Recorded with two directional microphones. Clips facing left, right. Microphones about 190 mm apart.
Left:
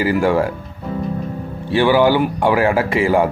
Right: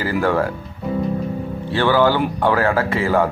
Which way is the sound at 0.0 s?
15° left (ahead or behind).